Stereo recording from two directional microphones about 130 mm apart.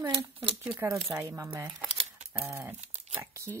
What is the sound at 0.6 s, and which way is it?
Speech, 20° right (ahead or behind).